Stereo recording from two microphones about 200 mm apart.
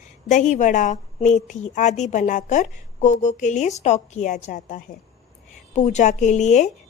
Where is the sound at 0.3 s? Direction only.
35° left (ahead or behind).